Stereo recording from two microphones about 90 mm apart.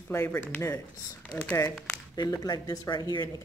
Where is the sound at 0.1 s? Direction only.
30° left (ahead or behind).